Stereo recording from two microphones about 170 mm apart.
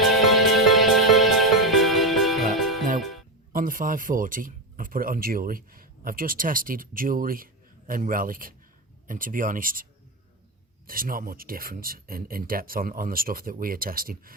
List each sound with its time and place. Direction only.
0.0 s music: centre (ahead or behind)
3.5 s speech: 55° right (ahead or behind)
10.8 s speech: 55° right (ahead or behind)